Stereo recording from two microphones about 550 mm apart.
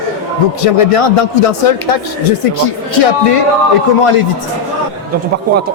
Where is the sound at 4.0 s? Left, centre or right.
Left.